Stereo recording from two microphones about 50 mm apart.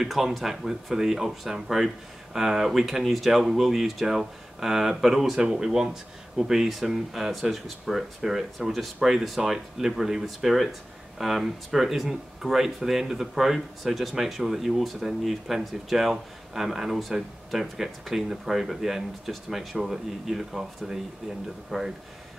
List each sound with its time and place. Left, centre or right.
0.0 s speech: centre